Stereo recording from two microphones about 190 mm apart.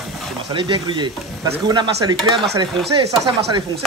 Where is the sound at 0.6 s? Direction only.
25° right (ahead or behind).